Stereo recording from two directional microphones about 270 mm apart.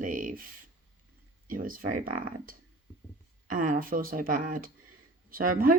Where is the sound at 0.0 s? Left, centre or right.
Right.